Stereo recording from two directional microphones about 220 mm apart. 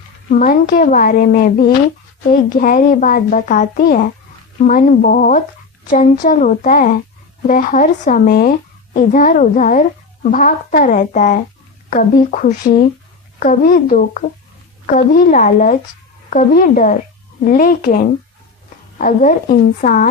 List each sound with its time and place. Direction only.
0.3 s speech: 35° left (ahead or behind)